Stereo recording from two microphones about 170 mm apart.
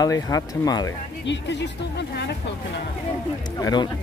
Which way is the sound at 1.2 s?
90° left.